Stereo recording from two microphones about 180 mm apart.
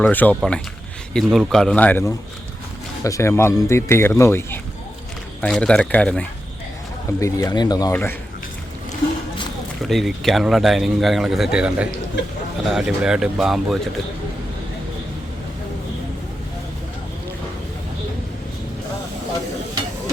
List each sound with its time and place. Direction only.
0.0 s speech: 10° left (ahead or behind)
9.9 s speech: centre (ahead or behind)